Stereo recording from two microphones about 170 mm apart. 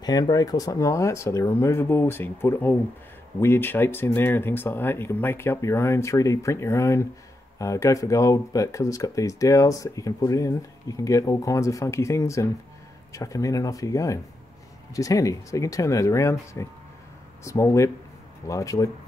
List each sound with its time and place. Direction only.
0.0 s speech: 25° left (ahead or behind)